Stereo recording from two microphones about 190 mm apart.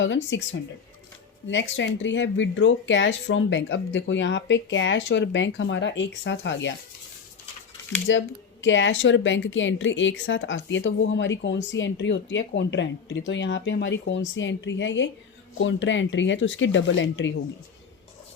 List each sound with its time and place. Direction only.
0.0 s speech: 75° left (ahead or behind)
1.5 s speech: 75° left (ahead or behind)
8.1 s speech: 80° left